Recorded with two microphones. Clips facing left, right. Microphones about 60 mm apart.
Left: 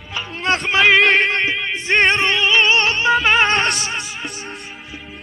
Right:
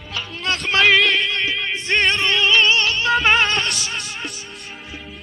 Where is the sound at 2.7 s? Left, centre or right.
Left.